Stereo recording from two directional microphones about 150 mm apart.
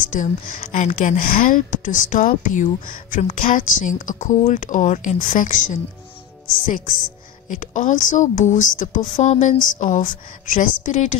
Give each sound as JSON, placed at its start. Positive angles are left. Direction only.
{"t": 0.1, "sound": "a woman's voice", "side_deg": 60}
{"t": 7.4, "sound": "a woman's voice", "side_deg": 55}